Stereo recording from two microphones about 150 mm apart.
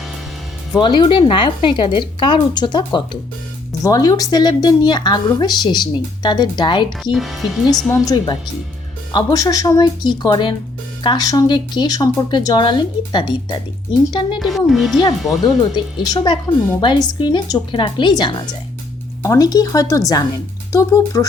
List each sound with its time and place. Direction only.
0.8 s a woman's voice: 35° left (ahead or behind)
7.0 s speech: centre (ahead or behind)
7.9 s a woman's voice: 25° left (ahead or behind)
14.3 s speech: centre (ahead or behind)
15.7 s a woman's voice: 30° left (ahead or behind)